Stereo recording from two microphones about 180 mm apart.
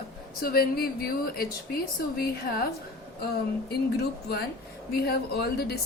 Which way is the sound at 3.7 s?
60° left (ahead or behind).